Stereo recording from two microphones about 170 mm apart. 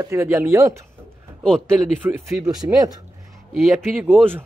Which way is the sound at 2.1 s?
20° right (ahead or behind).